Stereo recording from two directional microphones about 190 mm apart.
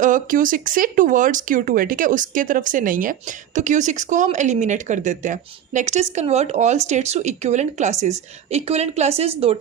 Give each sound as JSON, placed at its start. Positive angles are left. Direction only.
{"t": 0.0, "sound": "speech", "side_deg": -45}